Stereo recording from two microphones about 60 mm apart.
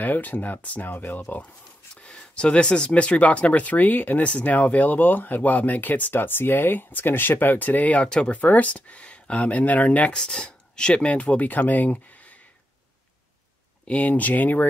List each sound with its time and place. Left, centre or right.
0.0 s speech: left
2.0 s speech: centre
13.8 s speech: left